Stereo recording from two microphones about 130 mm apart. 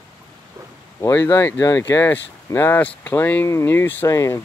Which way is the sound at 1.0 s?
20° left (ahead or behind).